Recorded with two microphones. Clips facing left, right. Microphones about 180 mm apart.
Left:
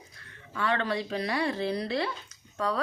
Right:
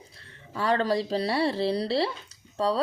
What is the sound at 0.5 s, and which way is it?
A woman's voice, 35° right (ahead or behind).